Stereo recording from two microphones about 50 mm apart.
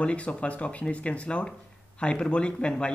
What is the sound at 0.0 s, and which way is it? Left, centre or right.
Speech, left.